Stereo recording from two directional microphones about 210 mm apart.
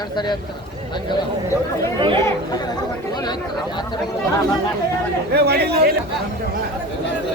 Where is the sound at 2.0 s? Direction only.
25° right (ahead or behind).